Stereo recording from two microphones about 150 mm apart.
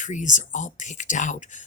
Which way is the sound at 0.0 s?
55° left (ahead or behind).